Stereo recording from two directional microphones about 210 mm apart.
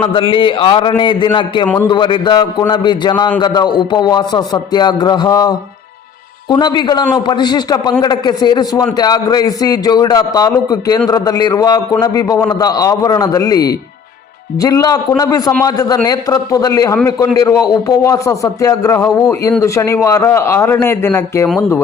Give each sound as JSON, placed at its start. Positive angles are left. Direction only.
{"t": 0.0, "sound": "a man's voice", "side_deg": 25}
{"t": 1.6, "sound": "a man's voice", "side_deg": 10}
{"t": 1.9, "sound": "a man's voice", "side_deg": 20}